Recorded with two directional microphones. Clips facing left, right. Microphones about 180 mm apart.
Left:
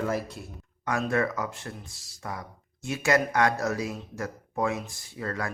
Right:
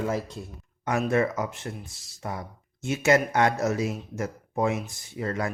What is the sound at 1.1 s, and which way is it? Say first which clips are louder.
Speech: right 3 dB; 20° right (ahead or behind).